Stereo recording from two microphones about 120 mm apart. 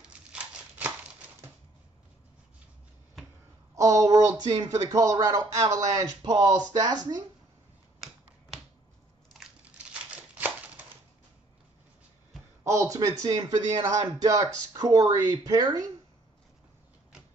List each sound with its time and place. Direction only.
0.0 s crumpling: 10° right (ahead or behind)
3.7 s speech: 30° right (ahead or behind)
10.1 s crumpling: 10° right (ahead or behind)
12.6 s speech: 25° right (ahead or behind)